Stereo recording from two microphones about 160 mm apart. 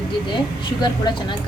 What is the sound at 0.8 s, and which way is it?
Speech, 30° left (ahead or behind).